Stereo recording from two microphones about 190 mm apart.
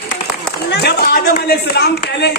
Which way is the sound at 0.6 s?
60° left (ahead or behind).